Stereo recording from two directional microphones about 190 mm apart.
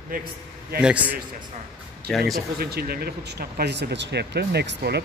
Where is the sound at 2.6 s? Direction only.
55° right (ahead or behind).